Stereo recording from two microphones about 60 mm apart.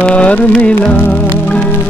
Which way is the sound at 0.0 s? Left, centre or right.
Left.